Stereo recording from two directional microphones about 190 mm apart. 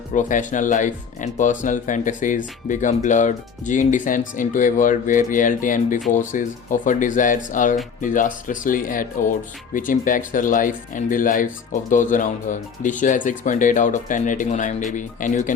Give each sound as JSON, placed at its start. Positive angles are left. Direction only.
{"t": 0.1, "sound": "speech", "side_deg": 40}